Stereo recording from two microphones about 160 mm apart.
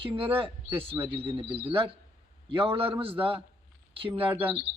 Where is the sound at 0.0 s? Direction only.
30° right (ahead or behind).